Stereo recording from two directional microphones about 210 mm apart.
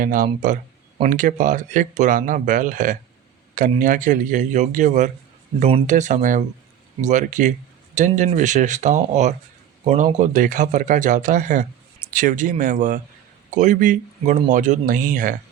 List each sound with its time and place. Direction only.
0.0 s speech: 40° right (ahead or behind)